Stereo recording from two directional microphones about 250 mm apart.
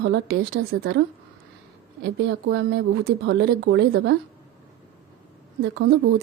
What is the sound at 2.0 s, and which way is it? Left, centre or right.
A woman's voice, right.